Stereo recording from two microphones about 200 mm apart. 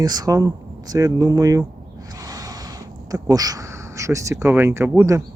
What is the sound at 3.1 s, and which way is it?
Speech, 20° right (ahead or behind).